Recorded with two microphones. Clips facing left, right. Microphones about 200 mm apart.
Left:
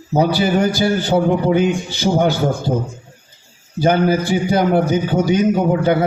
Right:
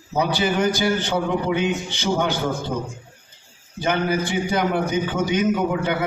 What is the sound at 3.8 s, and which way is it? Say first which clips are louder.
A man's voice: left 7 dB; 35° left (ahead or behind).